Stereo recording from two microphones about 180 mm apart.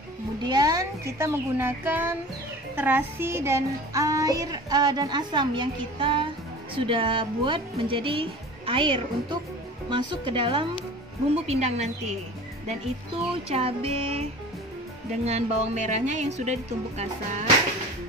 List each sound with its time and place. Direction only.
0.4 s speech: 20° right (ahead or behind)
2.7 s music: 10° right (ahead or behind); by 10.7 s 30° right (ahead or behind)
11.4 s speech: 35° right (ahead or behind)
13.5 s speech: 35° right (ahead or behind)
15.2 s speech: 40° right (ahead or behind)